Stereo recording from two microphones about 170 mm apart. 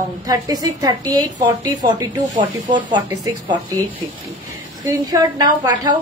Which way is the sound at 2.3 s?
25° right (ahead or behind).